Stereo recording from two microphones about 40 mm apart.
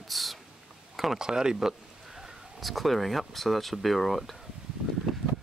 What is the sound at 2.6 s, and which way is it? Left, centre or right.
Speech, centre.